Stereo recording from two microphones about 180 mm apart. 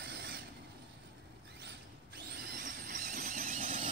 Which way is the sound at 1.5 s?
70° right (ahead or behind).